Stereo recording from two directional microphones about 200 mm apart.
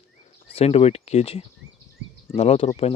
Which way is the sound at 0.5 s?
30° left (ahead or behind).